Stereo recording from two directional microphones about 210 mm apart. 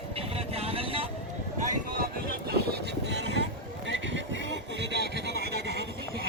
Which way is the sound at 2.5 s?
50° right (ahead or behind).